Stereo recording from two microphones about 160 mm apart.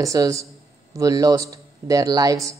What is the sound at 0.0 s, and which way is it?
A man's voice, 20° right (ahead or behind).